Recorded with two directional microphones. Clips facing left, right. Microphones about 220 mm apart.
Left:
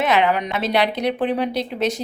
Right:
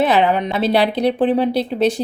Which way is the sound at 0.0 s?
30° right (ahead or behind).